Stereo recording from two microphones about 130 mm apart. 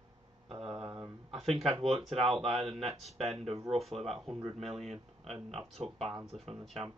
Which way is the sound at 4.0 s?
Centre (ahead or behind).